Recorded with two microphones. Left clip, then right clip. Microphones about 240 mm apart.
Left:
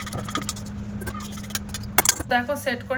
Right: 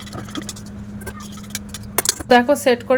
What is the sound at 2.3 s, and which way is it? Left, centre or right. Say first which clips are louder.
Speech: right 10 dB; right.